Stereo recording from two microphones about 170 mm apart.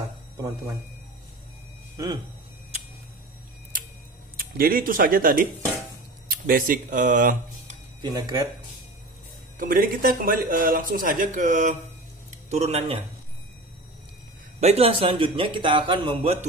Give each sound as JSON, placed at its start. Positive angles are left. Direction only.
{"t": 2.0, "sound": "speech", "side_deg": -20}
{"t": 4.4, "sound": "speech", "side_deg": -60}
{"t": 8.0, "sound": "speech", "side_deg": -25}
{"t": 9.6, "sound": "speech", "side_deg": -55}
{"t": 12.4, "sound": "speech", "side_deg": -40}
{"t": 14.6, "sound": "speech", "side_deg": -35}